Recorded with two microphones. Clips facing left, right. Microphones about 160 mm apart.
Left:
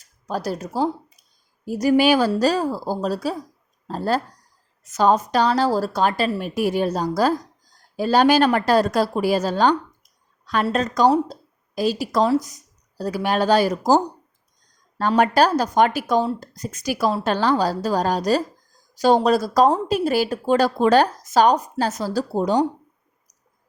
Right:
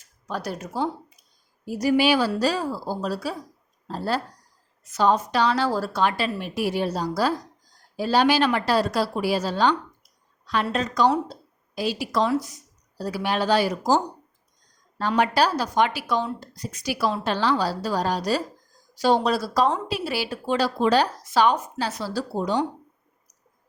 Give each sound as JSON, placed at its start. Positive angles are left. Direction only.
{"t": 0.0, "sound": "a woman's voice", "side_deg": 40}